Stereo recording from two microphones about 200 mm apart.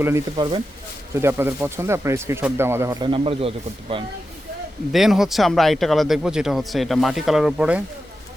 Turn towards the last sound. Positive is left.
turn(degrees=-5)  # may be behind; listen again after turning